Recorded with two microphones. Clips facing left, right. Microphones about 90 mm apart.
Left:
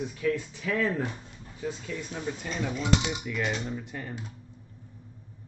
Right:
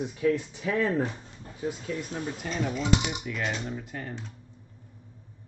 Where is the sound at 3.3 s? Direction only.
Centre (ahead or behind).